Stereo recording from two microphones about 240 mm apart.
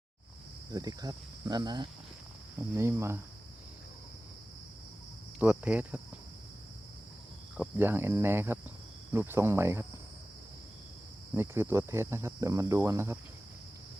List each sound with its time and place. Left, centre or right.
0.7 s speech: centre
5.4 s speech: centre
7.5 s speech: centre
11.3 s speech: centre